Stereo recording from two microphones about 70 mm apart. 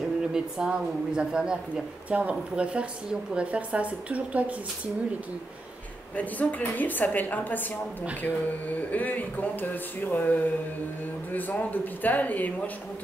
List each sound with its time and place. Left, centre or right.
0.3 s a woman's voice: centre
6.1 s speech: left